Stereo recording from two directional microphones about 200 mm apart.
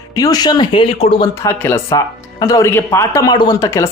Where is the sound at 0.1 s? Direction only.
20° left (ahead or behind).